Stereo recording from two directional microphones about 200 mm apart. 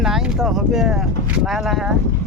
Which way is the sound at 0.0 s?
Centre (ahead or behind).